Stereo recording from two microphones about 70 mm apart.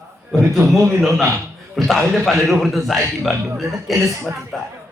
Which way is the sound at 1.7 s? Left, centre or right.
Centre.